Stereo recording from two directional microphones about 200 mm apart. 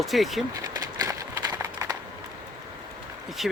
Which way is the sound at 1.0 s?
15° right (ahead or behind).